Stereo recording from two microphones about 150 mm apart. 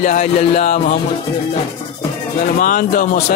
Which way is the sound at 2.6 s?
65° left (ahead or behind).